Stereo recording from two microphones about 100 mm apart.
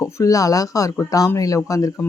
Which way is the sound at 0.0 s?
30° left (ahead or behind).